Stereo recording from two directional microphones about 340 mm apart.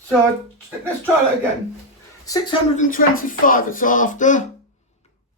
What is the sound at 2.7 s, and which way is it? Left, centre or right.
Speech, left.